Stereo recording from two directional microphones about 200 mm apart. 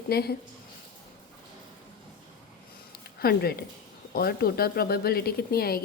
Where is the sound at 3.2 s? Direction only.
50° left (ahead or behind).